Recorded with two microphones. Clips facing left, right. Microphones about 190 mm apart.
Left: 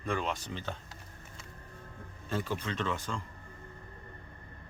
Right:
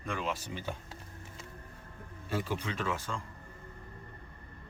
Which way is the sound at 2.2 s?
10° right (ahead or behind).